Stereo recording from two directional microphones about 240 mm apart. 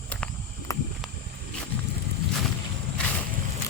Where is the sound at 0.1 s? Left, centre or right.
Centre.